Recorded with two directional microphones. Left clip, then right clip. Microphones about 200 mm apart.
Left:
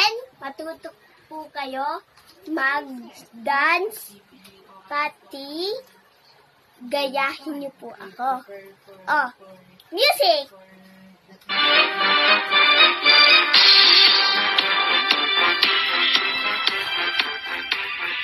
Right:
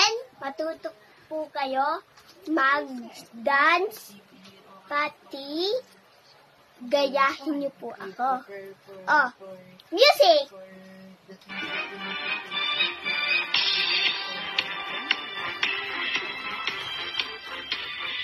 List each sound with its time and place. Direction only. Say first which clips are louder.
0.0 s a sound: left 2 dB; centre (ahead or behind)
1.5 s a child's voice: right 1 dB; 5° right (ahead or behind)
6.9 s a child's voice: right 1 dB; 5° right (ahead or behind)
9.9 s a child's voice: right 1 dB; 15° right (ahead or behind)
11.4 s music: left 15 dB; 40° left (ahead or behind)